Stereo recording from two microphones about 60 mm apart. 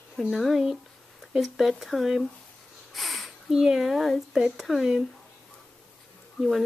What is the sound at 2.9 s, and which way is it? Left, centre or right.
Sniff, centre.